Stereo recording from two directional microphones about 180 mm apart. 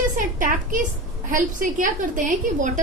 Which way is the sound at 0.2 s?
50° right (ahead or behind).